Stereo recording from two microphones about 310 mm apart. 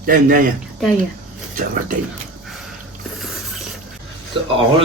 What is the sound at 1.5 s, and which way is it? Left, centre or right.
Speech, right.